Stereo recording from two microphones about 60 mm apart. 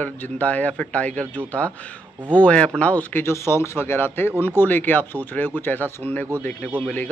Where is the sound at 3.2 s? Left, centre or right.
Left.